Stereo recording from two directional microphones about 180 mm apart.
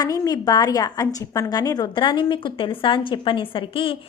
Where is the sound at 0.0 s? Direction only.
20° left (ahead or behind).